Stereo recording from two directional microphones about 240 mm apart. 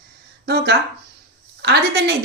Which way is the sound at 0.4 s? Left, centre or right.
Right.